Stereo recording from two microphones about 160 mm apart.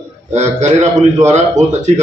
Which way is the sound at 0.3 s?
45° right (ahead or behind).